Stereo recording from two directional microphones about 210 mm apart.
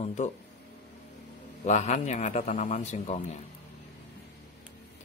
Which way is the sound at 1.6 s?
35° left (ahead or behind).